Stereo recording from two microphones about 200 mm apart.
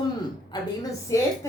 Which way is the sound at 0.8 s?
15° left (ahead or behind).